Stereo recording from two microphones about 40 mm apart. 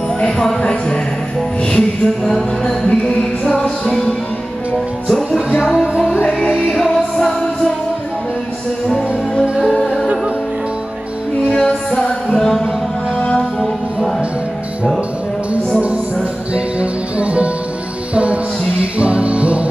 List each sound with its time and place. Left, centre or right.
0.4 s music: centre
5.8 s music: centre
11.5 s music: left
12.4 s music: centre
13.2 s music: left
16.5 s music: right